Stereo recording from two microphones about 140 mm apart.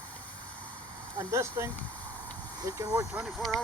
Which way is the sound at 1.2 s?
20° right (ahead or behind).